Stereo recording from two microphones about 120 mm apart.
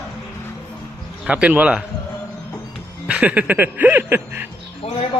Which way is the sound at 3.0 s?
10° right (ahead or behind).